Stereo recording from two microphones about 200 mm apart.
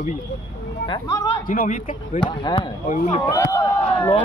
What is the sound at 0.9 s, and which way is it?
Speech, 15° left (ahead or behind).